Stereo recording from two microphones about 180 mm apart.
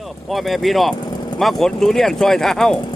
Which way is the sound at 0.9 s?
25° left (ahead or behind).